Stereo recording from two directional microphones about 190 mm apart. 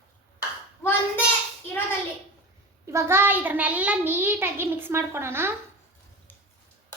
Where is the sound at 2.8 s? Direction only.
15° right (ahead or behind).